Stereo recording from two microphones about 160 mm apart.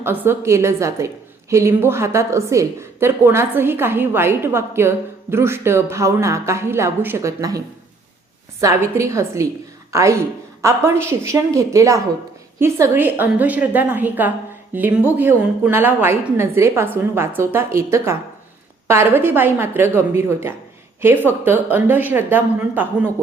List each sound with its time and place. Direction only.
0.0 s a woman's voice: 15° right (ahead or behind)
8.6 s a woman's voice: 20° right (ahead or behind)